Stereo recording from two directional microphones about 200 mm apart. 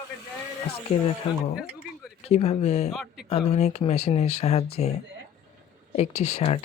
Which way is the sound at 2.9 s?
Centre (ahead or behind).